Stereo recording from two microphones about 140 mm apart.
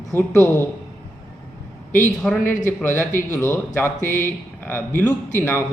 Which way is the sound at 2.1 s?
5° left (ahead or behind).